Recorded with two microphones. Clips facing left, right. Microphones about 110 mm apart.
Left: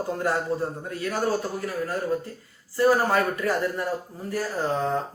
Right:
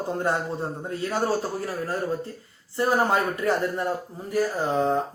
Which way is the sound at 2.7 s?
20° right (ahead or behind).